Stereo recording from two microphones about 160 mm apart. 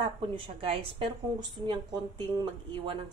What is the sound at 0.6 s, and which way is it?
A woman's voice, 35° right (ahead or behind).